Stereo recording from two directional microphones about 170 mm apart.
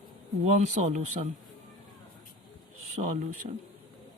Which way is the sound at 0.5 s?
45° right (ahead or behind).